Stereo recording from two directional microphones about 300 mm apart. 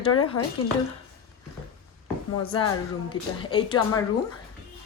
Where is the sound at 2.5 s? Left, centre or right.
Centre.